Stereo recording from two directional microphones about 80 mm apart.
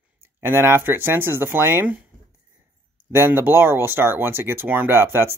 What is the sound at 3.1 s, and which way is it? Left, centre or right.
Speech, right.